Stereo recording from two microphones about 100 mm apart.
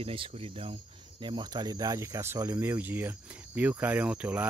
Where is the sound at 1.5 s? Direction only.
40° right (ahead or behind).